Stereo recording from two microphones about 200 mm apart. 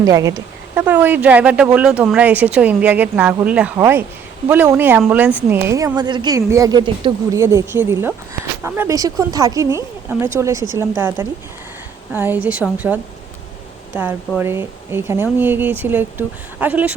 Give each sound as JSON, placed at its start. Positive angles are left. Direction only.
{"t": 0.0, "sound": "speech", "side_deg": -15}